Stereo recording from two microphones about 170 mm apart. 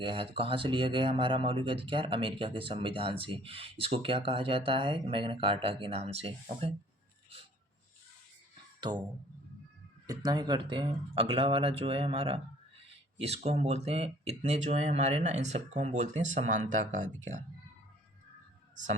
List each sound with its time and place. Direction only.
0.0 s speech: 30° right (ahead or behind)
10.1 s speech: 25° right (ahead or behind); by 17.4 s 45° right (ahead or behind)